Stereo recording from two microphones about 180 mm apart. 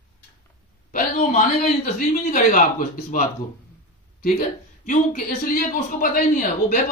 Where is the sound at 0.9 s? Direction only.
45° left (ahead or behind).